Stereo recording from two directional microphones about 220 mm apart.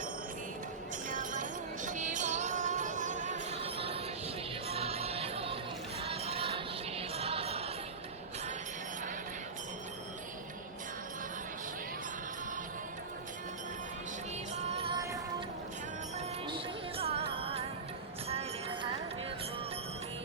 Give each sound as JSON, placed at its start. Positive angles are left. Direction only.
{"t": 1.1, "sound": "music", "side_deg": -35}
{"t": 14.5, "sound": "music", "side_deg": -30}
{"t": 17.0, "sound": "music", "side_deg": -25}